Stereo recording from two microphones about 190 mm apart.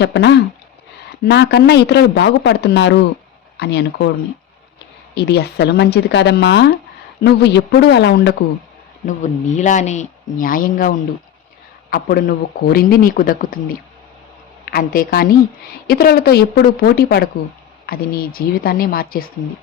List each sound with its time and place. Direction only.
0.0 s a man's voice: 65° left (ahead or behind)
5.1 s a man's voice: 60° left (ahead or behind)
9.0 s speech: 40° left (ahead or behind)
14.6 s a woman's voice: 50° left (ahead or behind)